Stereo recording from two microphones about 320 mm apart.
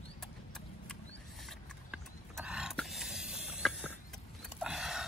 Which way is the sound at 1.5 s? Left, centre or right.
Centre.